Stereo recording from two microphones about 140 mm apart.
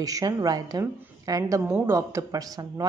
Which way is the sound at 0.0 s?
25° right (ahead or behind).